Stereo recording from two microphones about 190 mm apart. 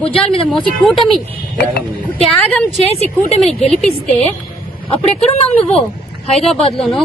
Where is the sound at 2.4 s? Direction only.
5° left (ahead or behind).